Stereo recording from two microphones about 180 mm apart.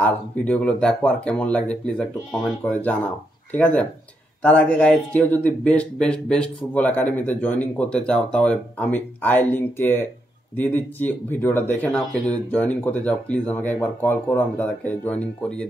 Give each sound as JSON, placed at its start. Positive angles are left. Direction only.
{"t": 0.0, "sound": "speech", "side_deg": 5}